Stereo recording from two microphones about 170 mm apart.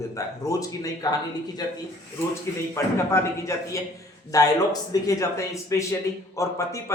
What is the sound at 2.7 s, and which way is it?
A man's voice, 15° left (ahead or behind).